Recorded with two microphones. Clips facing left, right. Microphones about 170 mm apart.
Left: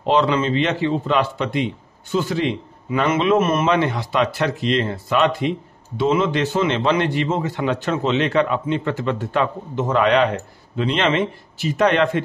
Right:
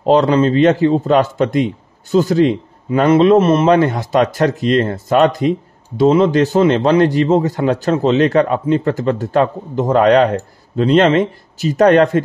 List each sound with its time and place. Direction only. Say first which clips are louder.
0.0 s a man's voice: right 6 dB; 40° right (ahead or behind)